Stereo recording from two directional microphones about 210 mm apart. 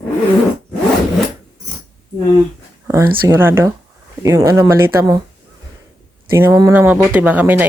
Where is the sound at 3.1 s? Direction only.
15° right (ahead or behind).